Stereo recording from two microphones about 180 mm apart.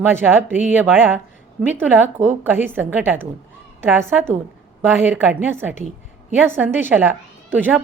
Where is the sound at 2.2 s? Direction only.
40° right (ahead or behind).